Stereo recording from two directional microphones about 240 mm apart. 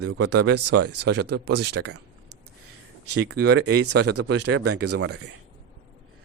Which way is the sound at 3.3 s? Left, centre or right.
Right.